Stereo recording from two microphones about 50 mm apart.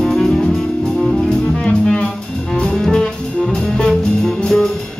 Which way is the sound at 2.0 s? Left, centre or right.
Centre.